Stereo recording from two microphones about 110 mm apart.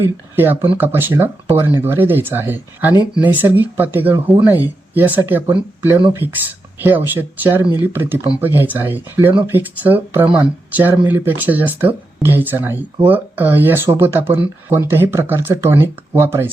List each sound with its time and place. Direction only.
0.0 s speech: 20° right (ahead or behind)